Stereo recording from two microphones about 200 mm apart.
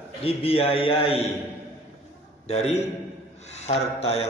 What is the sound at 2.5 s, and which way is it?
A man's voice, 35° left (ahead or behind).